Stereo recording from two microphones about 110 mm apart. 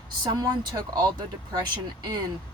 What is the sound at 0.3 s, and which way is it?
A woman's voice, 35° right (ahead or behind).